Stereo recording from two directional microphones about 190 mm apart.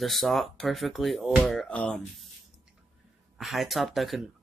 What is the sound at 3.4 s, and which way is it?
Speech, centre (ahead or behind).